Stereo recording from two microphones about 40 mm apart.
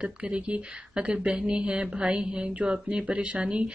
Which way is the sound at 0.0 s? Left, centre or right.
Right.